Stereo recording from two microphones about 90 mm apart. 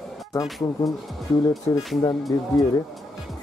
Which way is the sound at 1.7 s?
40° left (ahead or behind).